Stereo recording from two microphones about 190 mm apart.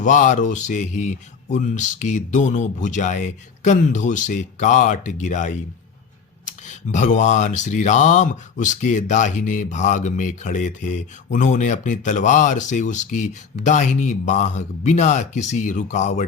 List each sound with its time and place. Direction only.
0.0 s speech: 40° left (ahead or behind)
6.7 s speech: 40° left (ahead or behind)